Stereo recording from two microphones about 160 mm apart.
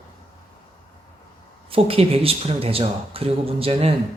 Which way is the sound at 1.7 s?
35° right (ahead or behind).